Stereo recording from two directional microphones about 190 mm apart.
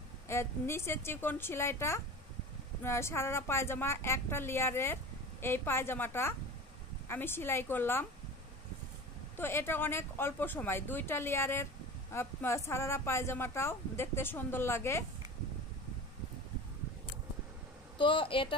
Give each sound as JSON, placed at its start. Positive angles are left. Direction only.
{"t": 0.3, "sound": "a woman's voice", "side_deg": 15}
{"t": 9.4, "sound": "a woman's voice", "side_deg": 10}
{"t": 17.9, "sound": "a woman's voice", "side_deg": 25}